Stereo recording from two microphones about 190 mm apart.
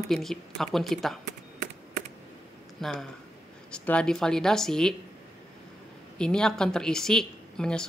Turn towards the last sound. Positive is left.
turn(degrees=5)  # may be behind; listen again after turning